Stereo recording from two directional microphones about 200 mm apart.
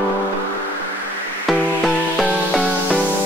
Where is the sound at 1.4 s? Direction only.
Centre (ahead or behind).